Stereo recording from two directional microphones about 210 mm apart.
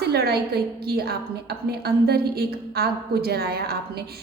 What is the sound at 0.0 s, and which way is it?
A woman's voice, 50° right (ahead or behind).